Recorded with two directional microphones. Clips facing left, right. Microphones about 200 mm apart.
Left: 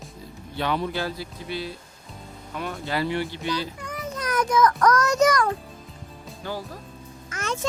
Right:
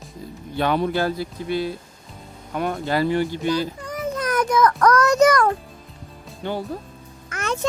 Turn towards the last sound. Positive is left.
turn(degrees=-60)  # may be behind; listen again after turning